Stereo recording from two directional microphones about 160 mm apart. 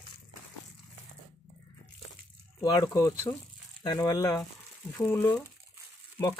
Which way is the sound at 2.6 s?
25° left (ahead or behind).